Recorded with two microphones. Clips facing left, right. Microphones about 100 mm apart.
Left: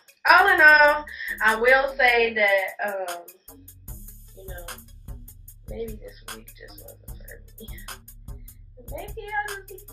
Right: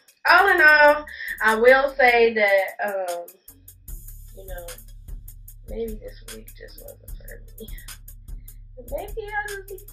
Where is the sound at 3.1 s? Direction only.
55° left (ahead or behind).